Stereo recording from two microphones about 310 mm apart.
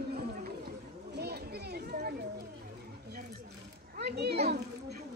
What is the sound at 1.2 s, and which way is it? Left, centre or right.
Children playing, right.